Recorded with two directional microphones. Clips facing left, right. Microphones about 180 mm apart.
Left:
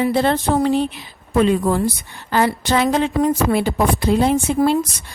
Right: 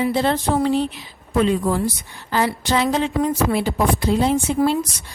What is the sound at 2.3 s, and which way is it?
A woman's voice, 55° left (ahead or behind).